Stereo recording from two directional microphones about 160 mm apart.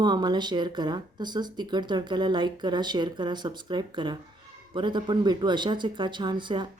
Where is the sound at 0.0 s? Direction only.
25° right (ahead or behind).